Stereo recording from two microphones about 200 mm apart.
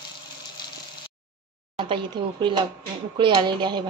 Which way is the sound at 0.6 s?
20° left (ahead or behind).